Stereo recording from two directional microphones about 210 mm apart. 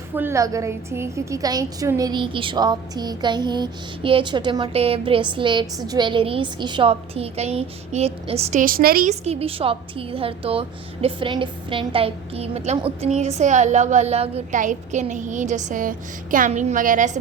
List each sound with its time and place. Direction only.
0.2 s a woman's voice: 15° right (ahead or behind); by 9.1 s 45° right (ahead or behind)
9.2 s a woman's voice: 30° right (ahead or behind)